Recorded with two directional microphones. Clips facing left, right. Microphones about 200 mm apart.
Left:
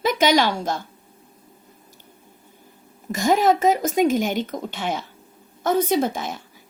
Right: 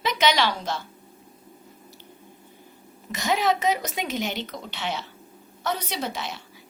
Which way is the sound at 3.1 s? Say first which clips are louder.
Left 6 dB; 45° left (ahead or behind).